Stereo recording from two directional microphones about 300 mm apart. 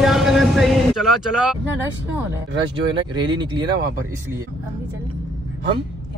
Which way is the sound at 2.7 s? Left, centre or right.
Centre.